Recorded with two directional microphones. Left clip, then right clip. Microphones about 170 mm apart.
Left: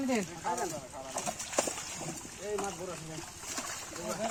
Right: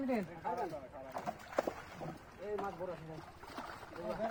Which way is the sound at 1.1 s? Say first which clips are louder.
Left 4 dB; 10° right (ahead or behind).